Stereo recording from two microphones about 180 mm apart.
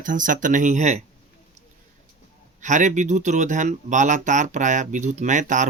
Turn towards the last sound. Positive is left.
turn(degrees=-45)  # may be behind; listen again after turning